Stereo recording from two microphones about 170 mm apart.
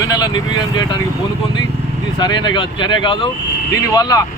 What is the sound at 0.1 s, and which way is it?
Speech, 25° left (ahead or behind).